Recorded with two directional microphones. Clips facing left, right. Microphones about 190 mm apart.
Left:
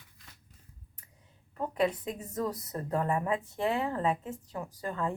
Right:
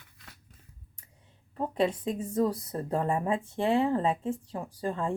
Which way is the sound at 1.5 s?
30° right (ahead or behind).